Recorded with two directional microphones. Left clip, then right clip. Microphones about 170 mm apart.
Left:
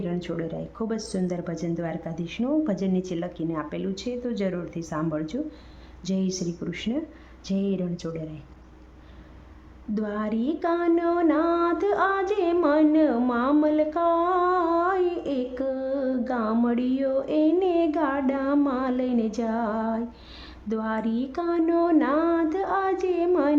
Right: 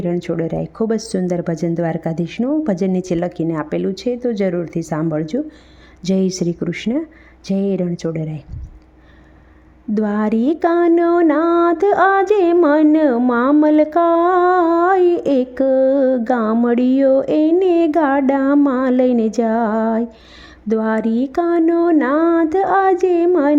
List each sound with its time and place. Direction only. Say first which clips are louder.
0.0 s speech: right 10 dB; 40° right (ahead or behind)
6.0 s music: right 11 dB; 45° right (ahead or behind)
7.4 s speech: right 9 dB; 40° right (ahead or behind)
9.9 s music: right 10 dB; 45° right (ahead or behind)